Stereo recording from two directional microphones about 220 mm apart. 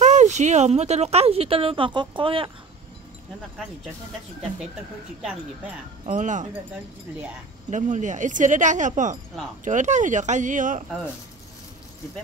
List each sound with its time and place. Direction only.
0.0 s speech: 30° right (ahead or behind)
5.2 s speech: 5° right (ahead or behind)
6.0 s speech: 35° right (ahead or behind)
7.7 s speech: 35° right (ahead or behind)